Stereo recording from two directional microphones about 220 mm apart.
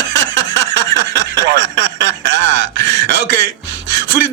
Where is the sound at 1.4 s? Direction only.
55° right (ahead or behind).